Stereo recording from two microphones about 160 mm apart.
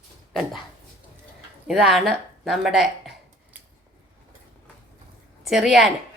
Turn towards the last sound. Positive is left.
turn(degrees=0)  # may be behind; listen again after turning